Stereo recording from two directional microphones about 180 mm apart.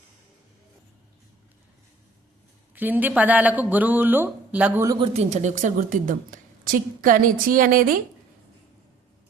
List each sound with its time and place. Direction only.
2.7 s speech: 10° right (ahead or behind)
4.9 s a woman's voice: 40° right (ahead or behind)